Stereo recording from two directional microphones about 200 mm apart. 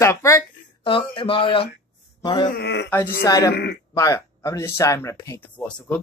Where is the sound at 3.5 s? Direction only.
55° left (ahead or behind).